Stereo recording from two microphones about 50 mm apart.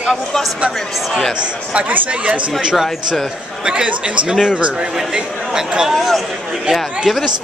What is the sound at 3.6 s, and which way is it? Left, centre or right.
Speech, right.